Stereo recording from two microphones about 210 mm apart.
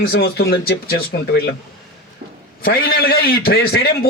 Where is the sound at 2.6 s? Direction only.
45° left (ahead or behind).